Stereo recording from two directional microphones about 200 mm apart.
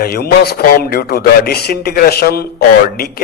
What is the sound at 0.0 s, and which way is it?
Speech, 50° left (ahead or behind).